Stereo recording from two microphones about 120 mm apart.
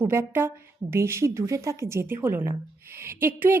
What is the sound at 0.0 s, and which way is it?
A woman's voice, 20° right (ahead or behind).